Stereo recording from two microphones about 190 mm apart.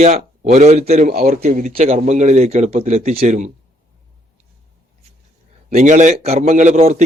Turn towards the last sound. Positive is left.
turn(degrees=-35)  # may be behind; listen again after turning